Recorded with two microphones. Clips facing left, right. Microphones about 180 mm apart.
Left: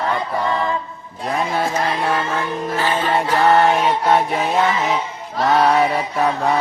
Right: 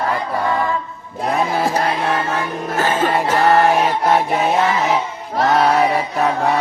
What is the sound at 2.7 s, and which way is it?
Music, 45° right (ahead or behind).